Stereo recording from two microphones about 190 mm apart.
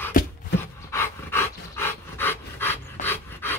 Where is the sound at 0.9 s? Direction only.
15° left (ahead or behind).